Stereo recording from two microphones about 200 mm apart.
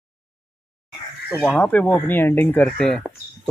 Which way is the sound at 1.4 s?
10° left (ahead or behind).